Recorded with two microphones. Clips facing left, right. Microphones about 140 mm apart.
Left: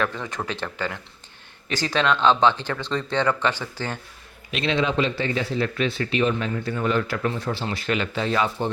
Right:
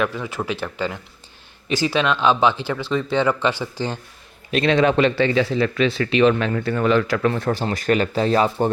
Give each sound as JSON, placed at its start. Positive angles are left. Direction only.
{"t": 0.0, "sound": "speech", "side_deg": -5}
{"t": 4.5, "sound": "speech", "side_deg": -50}